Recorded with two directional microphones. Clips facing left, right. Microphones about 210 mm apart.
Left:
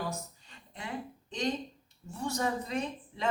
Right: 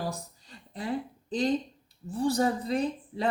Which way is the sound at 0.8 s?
35° right (ahead or behind).